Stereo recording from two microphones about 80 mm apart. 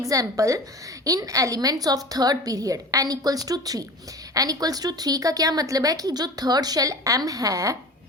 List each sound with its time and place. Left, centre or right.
0.0 s speech: right